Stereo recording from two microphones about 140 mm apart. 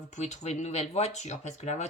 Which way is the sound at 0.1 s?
55° left (ahead or behind).